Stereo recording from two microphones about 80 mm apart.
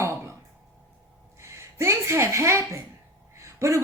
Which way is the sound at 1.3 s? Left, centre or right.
Right.